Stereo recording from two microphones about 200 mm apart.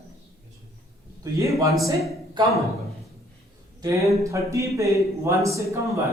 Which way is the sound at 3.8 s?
15° right (ahead or behind).